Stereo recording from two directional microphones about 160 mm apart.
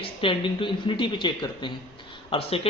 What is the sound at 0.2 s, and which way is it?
Speech, 35° left (ahead or behind).